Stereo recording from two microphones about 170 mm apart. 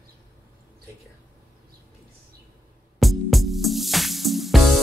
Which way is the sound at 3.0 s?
Centre (ahead or behind).